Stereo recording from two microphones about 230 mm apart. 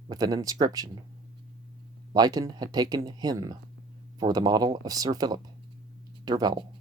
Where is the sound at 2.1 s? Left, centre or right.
Centre.